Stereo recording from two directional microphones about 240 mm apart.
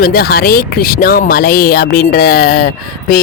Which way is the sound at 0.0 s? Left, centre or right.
Left.